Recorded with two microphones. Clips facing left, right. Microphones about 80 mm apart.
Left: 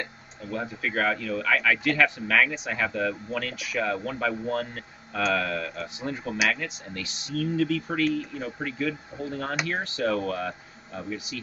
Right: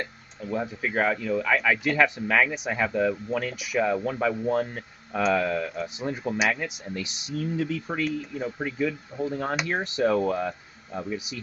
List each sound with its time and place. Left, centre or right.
0.5 s speech: centre